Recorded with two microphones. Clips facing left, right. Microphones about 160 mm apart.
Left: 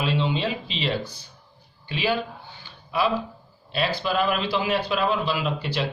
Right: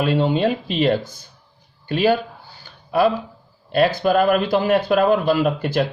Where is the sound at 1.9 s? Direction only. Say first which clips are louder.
Right 7 dB; 45° right (ahead or behind).